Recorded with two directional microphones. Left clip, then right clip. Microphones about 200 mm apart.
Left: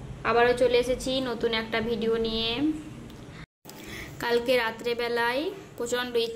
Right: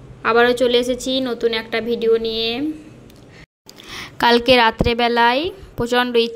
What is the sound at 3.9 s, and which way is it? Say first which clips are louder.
A woman's voice: right 12 dB; 45° right (ahead or behind).